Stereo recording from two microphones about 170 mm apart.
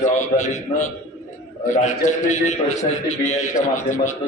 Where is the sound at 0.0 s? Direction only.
45° left (ahead or behind).